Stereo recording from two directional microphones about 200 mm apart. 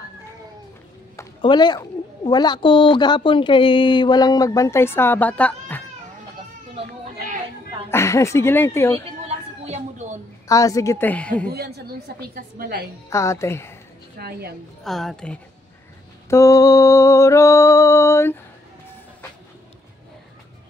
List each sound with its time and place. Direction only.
1.4 s a woman's voice: 20° left (ahead or behind)
7.9 s speech: 15° left (ahead or behind)
9.7 s a sound: 35° right (ahead or behind)
10.5 s speech: 15° left (ahead or behind)
11.5 s a woman's voice: 55° right (ahead or behind)
13.1 s speech: 15° left (ahead or behind)
14.2 s a woman's voice: 50° right (ahead or behind)
14.8 s a woman's voice: centre (ahead or behind)
16.3 s mantra: 15° left (ahead or behind)